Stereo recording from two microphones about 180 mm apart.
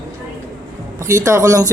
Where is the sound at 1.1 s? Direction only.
15° right (ahead or behind).